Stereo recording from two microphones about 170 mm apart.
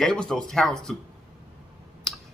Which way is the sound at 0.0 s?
5° left (ahead or behind).